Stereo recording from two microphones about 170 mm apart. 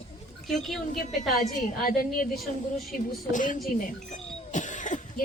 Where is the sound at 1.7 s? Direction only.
60° left (ahead or behind).